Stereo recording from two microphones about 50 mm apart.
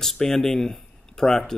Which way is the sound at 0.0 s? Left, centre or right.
Centre.